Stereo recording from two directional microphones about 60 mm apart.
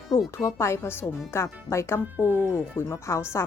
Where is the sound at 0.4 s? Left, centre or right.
Left.